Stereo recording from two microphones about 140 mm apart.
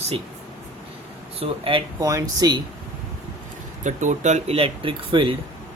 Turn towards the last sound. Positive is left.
turn(degrees=-35)  # may be behind; listen again after turning